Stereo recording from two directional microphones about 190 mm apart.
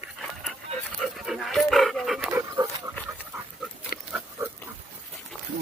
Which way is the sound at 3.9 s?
55° left (ahead or behind).